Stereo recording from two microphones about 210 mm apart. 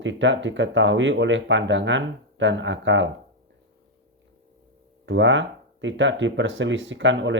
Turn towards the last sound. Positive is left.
turn(degrees=-60)  # may be behind; listen again after turning